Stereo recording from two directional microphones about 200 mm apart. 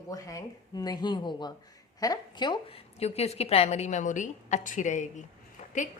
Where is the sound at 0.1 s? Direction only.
15° left (ahead or behind); by 5.2 s 40° left (ahead or behind).